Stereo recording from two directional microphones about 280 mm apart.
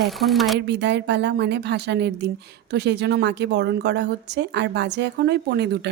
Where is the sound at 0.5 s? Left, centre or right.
Right.